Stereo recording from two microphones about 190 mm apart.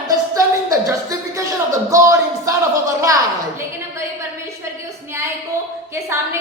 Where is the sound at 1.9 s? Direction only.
15° right (ahead or behind).